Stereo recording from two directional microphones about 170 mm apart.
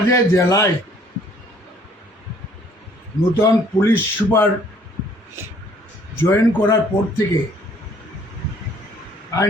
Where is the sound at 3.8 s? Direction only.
15° left (ahead or behind).